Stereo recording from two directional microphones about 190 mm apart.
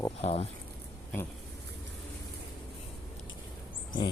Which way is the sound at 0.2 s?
30° left (ahead or behind).